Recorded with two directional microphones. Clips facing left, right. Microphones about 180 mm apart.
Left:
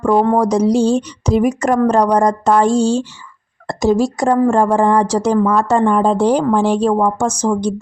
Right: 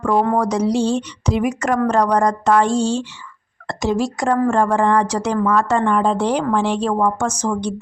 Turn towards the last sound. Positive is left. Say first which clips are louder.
# left 4 dB
turn(degrees=35)  # may be behind; listen again after turning